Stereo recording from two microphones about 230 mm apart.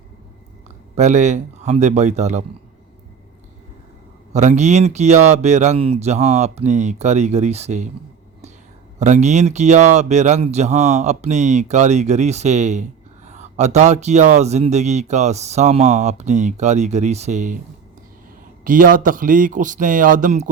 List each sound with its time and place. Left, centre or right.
0.9 s speech: right
4.4 s speech: right
9.0 s speech: right
18.6 s a man's voice: right